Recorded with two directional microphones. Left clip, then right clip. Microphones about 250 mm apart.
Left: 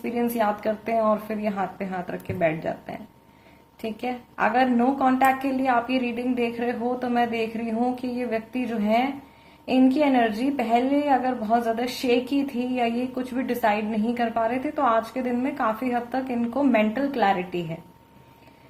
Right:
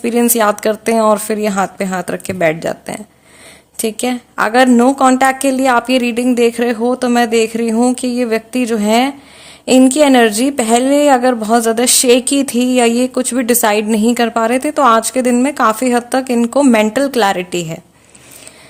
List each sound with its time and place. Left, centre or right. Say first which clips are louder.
0.0 s a woman's voice: right 12 dB; right